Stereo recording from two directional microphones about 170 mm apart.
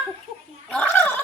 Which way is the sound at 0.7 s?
10° left (ahead or behind).